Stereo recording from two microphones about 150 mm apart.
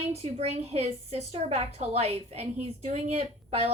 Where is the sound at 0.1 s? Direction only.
45° right (ahead or behind).